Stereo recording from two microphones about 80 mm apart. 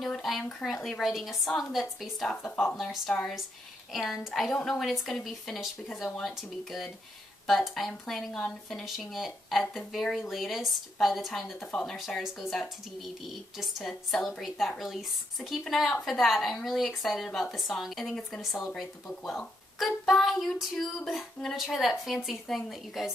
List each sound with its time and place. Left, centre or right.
0.0 s speech: centre
2.4 s speech: left
2.7 s speech: centre